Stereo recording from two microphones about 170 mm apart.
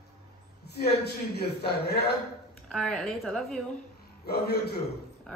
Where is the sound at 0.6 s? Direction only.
70° left (ahead or behind).